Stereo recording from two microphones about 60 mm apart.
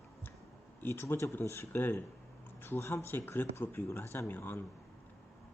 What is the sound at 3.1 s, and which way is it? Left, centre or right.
Speech, left.